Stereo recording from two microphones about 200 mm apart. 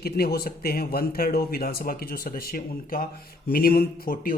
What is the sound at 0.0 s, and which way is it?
Speech, 50° left (ahead or behind).